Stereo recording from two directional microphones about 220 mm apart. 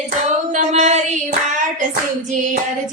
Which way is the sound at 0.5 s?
35° right (ahead or behind).